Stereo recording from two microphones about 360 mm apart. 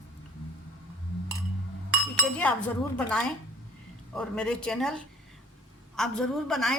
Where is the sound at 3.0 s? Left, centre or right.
Centre.